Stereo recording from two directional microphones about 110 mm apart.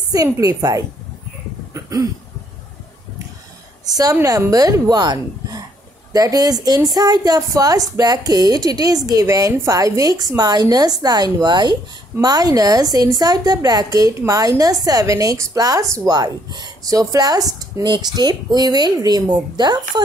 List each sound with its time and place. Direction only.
0.1 s a woman's voice: 35° right (ahead or behind)
1.7 s cough: 30° right (ahead or behind)
3.8 s a woman's voice: 35° right (ahead or behind)